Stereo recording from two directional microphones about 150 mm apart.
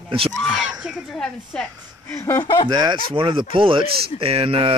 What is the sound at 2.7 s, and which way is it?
Speech, 30° right (ahead or behind).